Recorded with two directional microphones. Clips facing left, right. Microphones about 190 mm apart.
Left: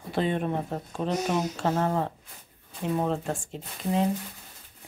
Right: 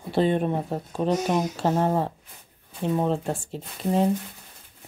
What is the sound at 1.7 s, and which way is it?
Speech, 25° right (ahead or behind).